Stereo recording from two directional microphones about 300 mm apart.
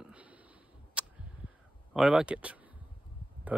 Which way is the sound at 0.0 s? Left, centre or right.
Centre.